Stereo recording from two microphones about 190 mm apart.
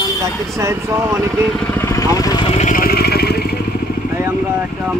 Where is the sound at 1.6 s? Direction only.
10° left (ahead or behind).